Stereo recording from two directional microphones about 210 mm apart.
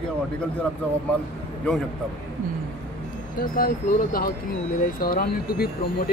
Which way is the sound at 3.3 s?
45° left (ahead or behind).